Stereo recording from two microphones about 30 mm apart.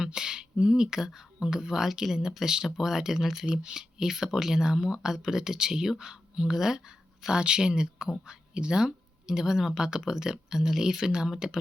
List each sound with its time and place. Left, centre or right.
0.0 s speech: right
3.6 s speech: right
7.3 s speech: right